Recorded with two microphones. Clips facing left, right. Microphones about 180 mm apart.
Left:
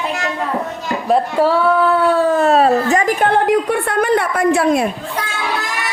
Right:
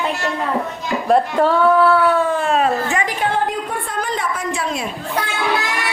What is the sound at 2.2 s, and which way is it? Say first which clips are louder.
A woman's voice: left 5 dB; 40° left (ahead or behind).